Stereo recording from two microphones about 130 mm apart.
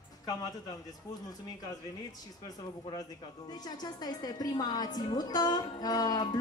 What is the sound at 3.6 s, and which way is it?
A woman's voice, 30° left (ahead or behind).